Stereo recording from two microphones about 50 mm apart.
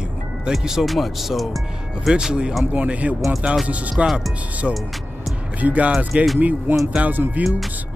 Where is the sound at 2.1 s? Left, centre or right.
Centre.